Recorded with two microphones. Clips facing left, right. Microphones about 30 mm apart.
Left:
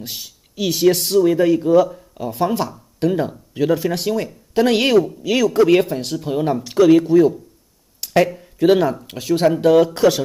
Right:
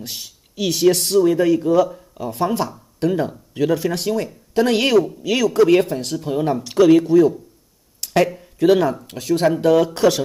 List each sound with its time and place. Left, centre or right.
0.0 s speech: centre
8.0 s a sound: centre
8.7 s speech: centre